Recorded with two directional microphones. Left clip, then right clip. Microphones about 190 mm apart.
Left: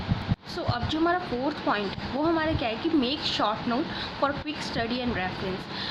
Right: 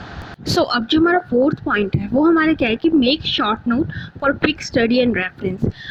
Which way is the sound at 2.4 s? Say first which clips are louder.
Right 11 dB; 50° right (ahead or behind).